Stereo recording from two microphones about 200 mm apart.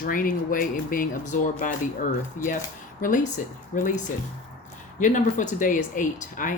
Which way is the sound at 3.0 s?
40° left (ahead or behind).